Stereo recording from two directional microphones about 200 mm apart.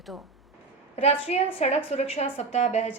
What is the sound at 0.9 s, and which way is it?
A woman's voice, 30° left (ahead or behind).